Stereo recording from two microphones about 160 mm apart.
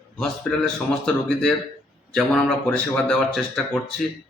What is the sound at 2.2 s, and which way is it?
Speech, 5° left (ahead or behind).